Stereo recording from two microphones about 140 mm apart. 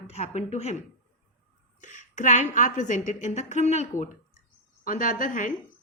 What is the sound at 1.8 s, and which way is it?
A woman's voice, 60° left (ahead or behind).